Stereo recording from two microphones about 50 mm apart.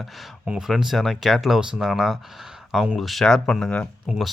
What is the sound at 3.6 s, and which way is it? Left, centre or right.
Speech, centre.